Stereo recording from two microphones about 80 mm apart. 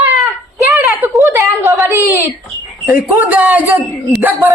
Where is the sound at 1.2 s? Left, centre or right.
Right.